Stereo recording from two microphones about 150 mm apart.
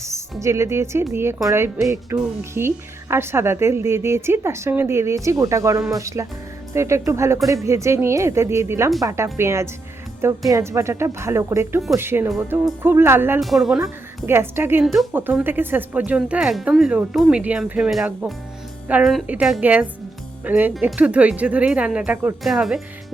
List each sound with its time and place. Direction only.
0.0 s a woman's voice: 20° right (ahead or behind)
13.4 s speech: centre (ahead or behind)
14.3 s a woman's voice: 15° right (ahead or behind)